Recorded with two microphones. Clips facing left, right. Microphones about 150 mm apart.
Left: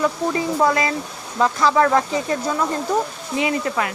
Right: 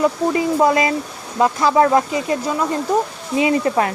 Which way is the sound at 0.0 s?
20° right (ahead or behind).